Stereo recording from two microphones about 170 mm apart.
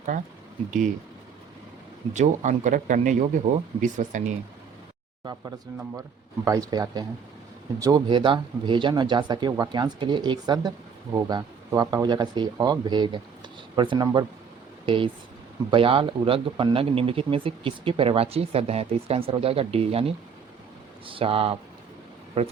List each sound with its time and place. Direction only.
2.1 s speech: 45° right (ahead or behind)
5.2 s speech: 20° right (ahead or behind); by 22.5 s 40° right (ahead or behind)